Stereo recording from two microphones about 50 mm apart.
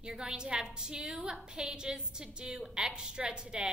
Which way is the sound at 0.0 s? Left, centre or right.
Centre.